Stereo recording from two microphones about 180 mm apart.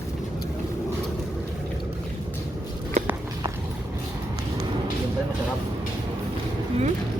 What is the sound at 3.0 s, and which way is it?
Walk, 40° right (ahead or behind).